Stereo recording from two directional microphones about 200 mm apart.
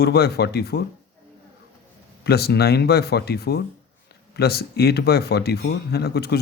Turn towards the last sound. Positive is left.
turn(degrees=55)  # may be behind; listen again after turning